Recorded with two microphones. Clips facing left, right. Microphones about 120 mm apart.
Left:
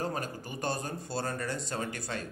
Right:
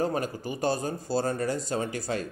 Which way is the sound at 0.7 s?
35° right (ahead or behind).